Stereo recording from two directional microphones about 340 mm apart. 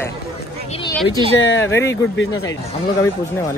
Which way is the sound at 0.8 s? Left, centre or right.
Centre.